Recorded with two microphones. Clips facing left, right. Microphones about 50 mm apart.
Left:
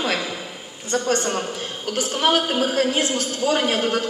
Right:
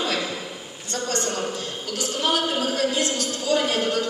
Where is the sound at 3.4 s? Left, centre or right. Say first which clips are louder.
Left 2 dB; left.